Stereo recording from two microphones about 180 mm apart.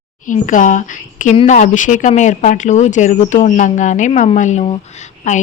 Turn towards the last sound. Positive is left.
turn(degrees=45)  # may be behind; listen again after turning